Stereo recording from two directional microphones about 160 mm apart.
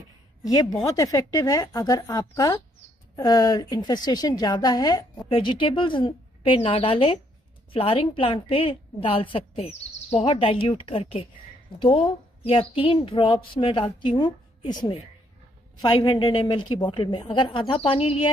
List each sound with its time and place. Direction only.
0.4 s a woman's voice: 25° left (ahead or behind); by 18.3 s 40° left (ahead or behind)